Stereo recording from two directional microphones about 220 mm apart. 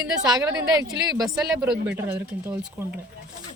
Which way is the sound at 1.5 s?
5° right (ahead or behind).